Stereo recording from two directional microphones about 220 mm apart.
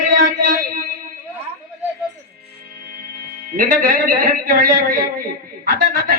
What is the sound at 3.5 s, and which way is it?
A man's voice, 40° right (ahead or behind).